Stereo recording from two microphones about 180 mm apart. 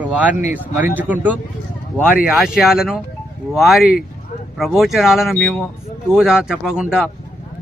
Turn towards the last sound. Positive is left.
turn(degrees=-5)  # may be behind; listen again after turning